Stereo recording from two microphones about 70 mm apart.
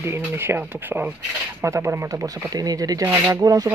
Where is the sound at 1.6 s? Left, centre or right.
Right.